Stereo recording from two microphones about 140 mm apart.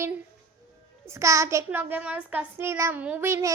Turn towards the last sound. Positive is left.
turn(degrees=-20)  # may be behind; listen again after turning